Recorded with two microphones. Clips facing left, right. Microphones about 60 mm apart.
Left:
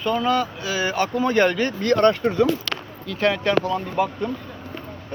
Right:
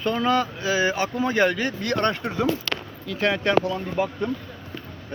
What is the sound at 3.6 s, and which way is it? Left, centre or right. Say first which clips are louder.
Speech: left 3 dB; left.